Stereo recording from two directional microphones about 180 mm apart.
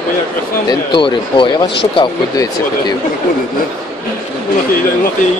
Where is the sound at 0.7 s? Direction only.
25° left (ahead or behind).